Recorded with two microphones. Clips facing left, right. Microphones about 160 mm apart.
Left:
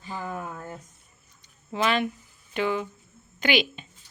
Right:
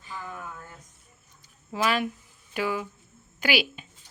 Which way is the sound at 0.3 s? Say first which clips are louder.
Left 6 dB; 50° left (ahead or behind).